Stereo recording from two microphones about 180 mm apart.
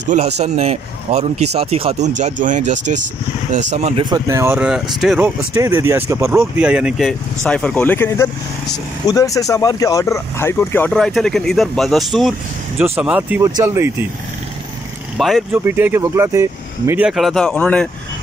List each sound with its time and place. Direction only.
0.1 s speech: 35° right (ahead or behind)
4.0 s speech: 20° right (ahead or behind); by 5.3 s centre (ahead or behind)
5.5 s speech: 15° right (ahead or behind)
15.1 s speech: centre (ahead or behind)
15.5 s speech: 10° right (ahead or behind); by 17.8 s 5° left (ahead or behind)